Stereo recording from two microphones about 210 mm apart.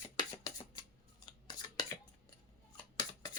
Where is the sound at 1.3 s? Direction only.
20° left (ahead or behind).